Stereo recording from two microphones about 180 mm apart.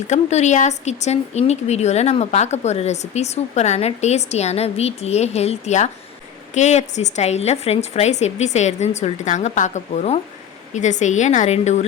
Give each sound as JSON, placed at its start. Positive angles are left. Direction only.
{"t": 0.1, "sound": "speech", "side_deg": 40}